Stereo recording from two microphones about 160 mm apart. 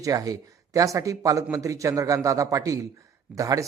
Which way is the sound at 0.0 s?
20° right (ahead or behind).